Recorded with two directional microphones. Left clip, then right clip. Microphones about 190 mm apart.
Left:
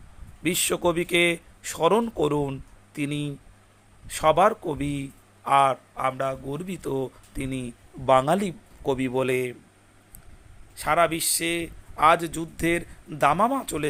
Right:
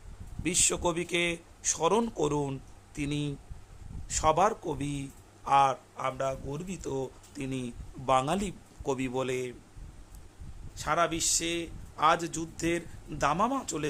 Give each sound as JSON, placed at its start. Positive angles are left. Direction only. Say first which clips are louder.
{"t": 0.4, "sound": "a man's voice", "louder": "left 5 dB", "side_deg": 15}
{"t": 10.8, "sound": "a man's voice", "louder": "left 6 dB", "side_deg": 20}